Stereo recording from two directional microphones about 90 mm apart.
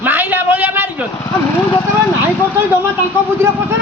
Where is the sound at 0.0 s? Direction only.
20° right (ahead or behind).